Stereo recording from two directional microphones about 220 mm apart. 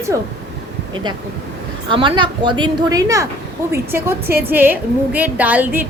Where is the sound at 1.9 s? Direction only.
20° right (ahead or behind).